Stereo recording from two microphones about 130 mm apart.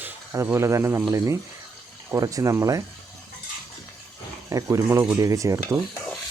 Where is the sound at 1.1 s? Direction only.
25° right (ahead or behind).